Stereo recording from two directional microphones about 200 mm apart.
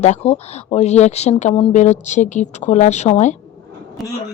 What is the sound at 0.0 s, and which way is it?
A woman's voice, 30° left (ahead or behind).